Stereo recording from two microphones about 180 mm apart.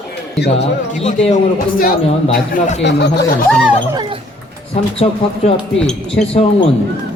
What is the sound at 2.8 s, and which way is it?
Speech, 70° left (ahead or behind).